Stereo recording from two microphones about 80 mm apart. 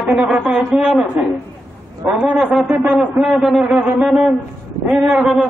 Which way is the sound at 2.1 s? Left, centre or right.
Centre.